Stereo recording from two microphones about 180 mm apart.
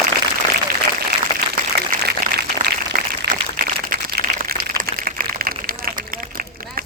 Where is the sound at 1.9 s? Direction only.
65° right (ahead or behind).